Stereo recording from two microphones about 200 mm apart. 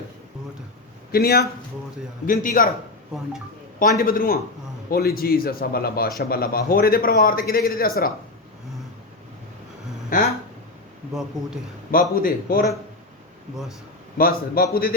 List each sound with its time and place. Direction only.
1.1 s a man's voice: 50° left (ahead or behind)
3.8 s a man's voice: 45° left (ahead or behind)
10.1 s speech: 45° left (ahead or behind)
11.1 s speech: centre (ahead or behind)
11.9 s a man's voice: 45° left (ahead or behind)
14.2 s a man's voice: 50° left (ahead or behind)